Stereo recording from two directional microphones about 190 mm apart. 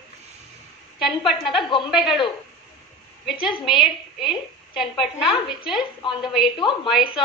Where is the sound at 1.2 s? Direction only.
Centre (ahead or behind).